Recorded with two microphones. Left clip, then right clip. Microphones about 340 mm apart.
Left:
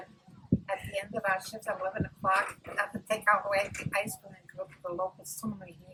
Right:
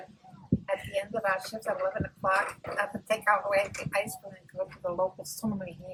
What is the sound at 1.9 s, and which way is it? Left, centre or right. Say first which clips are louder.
Speech: right 1 dB; centre.